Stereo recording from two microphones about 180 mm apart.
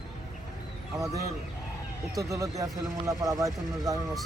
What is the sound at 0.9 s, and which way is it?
Speech, 20° right (ahead or behind).